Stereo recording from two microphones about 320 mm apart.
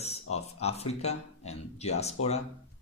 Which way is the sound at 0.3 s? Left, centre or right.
Centre.